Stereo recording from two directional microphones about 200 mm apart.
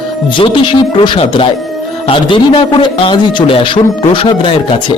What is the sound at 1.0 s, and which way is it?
A man's voice, 25° left (ahead or behind).